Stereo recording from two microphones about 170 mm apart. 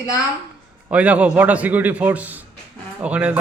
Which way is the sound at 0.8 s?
10° right (ahead or behind).